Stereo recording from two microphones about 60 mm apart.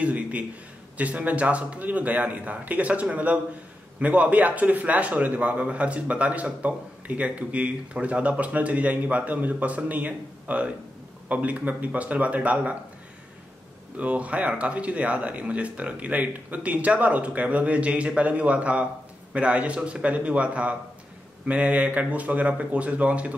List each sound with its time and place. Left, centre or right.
0.0 s a man's voice: right
13.9 s a man's voice: right